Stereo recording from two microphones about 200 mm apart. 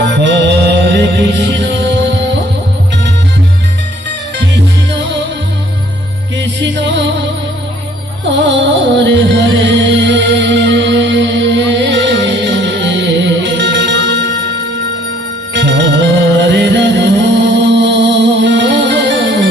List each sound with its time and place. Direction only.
0.0 s music: 65° right (ahead or behind)
6.3 s music: 65° right (ahead or behind)
8.3 s music: 65° right (ahead or behind)
15.5 s music: 65° right (ahead or behind)